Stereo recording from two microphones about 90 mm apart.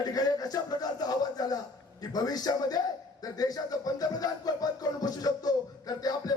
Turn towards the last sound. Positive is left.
turn(degrees=45)  # may be behind; listen again after turning